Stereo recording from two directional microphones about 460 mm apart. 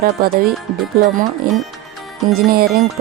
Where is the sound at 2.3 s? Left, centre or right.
Centre.